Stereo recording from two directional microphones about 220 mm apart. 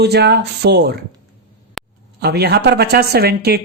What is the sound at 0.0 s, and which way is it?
Speech, 50° right (ahead or behind).